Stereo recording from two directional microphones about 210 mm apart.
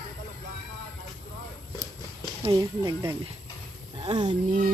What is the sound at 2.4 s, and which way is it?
Speech, 20° right (ahead or behind).